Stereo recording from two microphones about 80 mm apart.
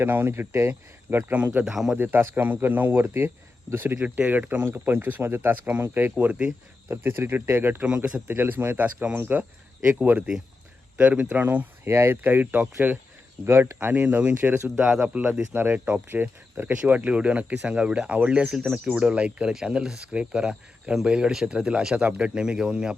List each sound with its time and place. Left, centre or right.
0.0 s speech: right
1.6 s speech: centre
2.0 s speech: right
3.9 s speech: centre
7.9 s speech: centre
13.4 s speech: right; by 15.2 s centre
15.5 s speech: right